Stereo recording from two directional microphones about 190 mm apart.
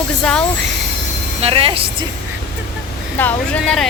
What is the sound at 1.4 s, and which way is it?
Speech, 30° right (ahead or behind).